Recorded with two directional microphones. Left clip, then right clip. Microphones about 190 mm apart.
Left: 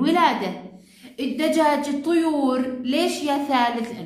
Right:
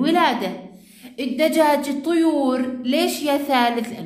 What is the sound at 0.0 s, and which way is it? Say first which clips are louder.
A woman's voice: right 1 dB; 35° right (ahead or behind).